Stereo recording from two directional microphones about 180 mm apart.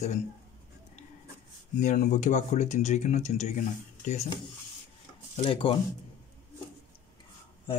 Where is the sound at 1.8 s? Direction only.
45° left (ahead or behind).